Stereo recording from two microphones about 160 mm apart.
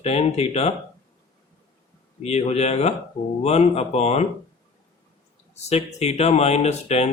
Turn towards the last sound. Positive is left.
turn(degrees=40)  # may be behind; listen again after turning